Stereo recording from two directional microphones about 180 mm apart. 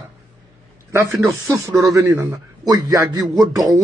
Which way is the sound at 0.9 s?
15° right (ahead or behind).